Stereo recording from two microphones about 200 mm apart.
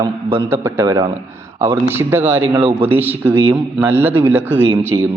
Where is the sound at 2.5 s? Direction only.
25° right (ahead or behind).